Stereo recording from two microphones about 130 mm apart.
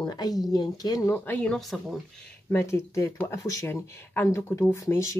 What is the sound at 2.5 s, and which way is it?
Speech, 20° left (ahead or behind).